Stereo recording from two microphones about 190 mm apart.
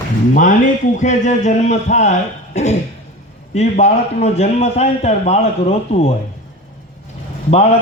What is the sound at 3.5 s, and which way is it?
A man's voice, 35° left (ahead or behind).